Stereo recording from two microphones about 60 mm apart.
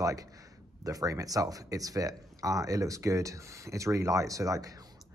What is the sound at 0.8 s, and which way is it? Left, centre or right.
Speech, right.